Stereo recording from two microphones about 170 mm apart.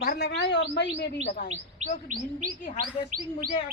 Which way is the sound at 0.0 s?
75° left (ahead or behind).